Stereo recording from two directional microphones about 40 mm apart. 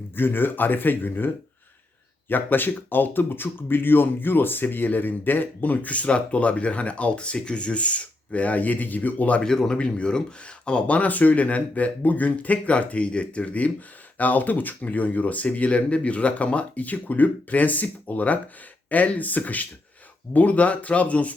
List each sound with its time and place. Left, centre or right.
0.2 s speech: left
2.3 s speech: left
9.4 s speech: centre
9.7 s speech: left